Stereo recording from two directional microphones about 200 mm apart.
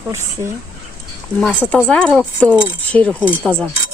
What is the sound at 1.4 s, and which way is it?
Speech, 5° left (ahead or behind).